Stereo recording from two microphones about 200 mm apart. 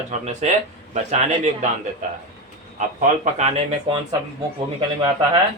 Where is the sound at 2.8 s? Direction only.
35° right (ahead or behind).